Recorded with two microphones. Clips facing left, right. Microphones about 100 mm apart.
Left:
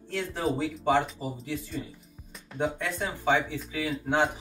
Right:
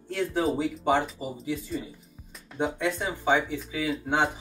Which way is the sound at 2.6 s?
5° right (ahead or behind).